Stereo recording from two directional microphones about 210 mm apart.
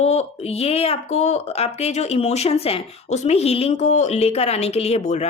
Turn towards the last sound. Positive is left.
turn(degrees=35)  # may be behind; listen again after turning